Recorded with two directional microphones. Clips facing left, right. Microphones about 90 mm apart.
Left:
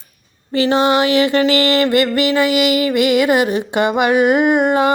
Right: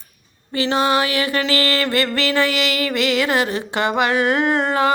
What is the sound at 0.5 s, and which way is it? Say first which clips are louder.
Mantra: left 4 dB; 30° left (ahead or behind).